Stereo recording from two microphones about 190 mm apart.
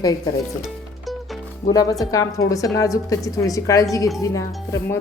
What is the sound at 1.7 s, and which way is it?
A woman's voice, 20° left (ahead or behind).